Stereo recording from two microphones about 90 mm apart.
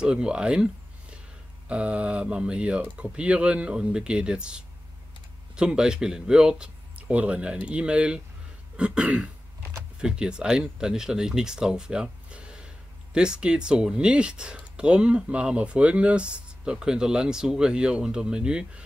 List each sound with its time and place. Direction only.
0.0 s speech: 10° right (ahead or behind)
1.7 s speech: 15° right (ahead or behind)